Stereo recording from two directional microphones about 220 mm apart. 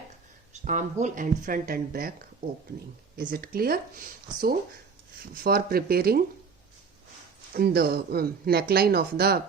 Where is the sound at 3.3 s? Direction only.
40° right (ahead or behind).